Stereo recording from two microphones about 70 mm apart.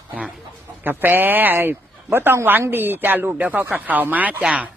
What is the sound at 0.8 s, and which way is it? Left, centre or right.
Speech, right.